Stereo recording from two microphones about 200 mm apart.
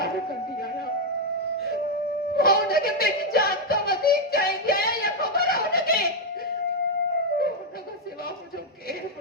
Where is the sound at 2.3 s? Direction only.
50° left (ahead or behind).